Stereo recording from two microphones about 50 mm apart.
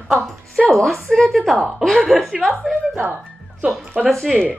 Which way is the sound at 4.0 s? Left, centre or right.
Centre.